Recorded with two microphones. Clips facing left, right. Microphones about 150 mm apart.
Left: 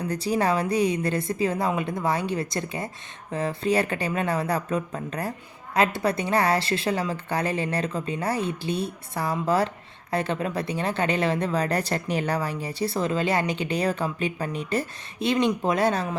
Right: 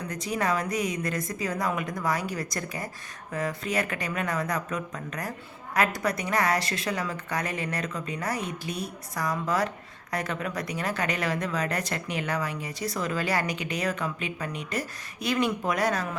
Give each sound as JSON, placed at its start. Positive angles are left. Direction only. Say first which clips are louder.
{"t": 0.0, "sound": "a woman's voice", "louder": "left 5 dB", "side_deg": 30}